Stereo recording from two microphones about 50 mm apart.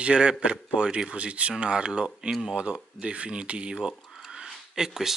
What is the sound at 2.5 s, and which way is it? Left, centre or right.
Speech, right.